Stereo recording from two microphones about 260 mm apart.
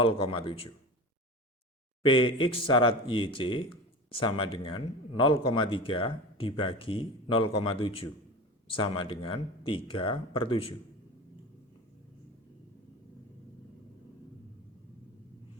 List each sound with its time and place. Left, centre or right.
0.0 s speech: centre
2.0 s speech: centre